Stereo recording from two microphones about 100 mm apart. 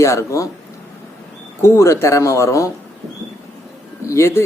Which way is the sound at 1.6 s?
30° left (ahead or behind).